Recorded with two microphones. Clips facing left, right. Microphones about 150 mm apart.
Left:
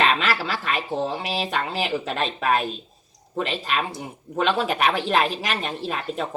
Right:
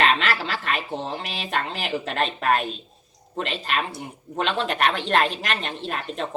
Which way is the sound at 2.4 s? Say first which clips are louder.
Even; centre (ahead or behind).